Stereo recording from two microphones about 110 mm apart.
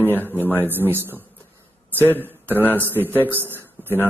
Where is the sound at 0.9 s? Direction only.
20° right (ahead or behind).